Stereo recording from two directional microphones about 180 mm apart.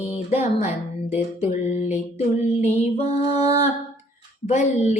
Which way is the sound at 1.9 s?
35° left (ahead or behind).